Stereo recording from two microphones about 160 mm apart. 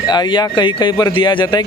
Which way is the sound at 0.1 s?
30° left (ahead or behind).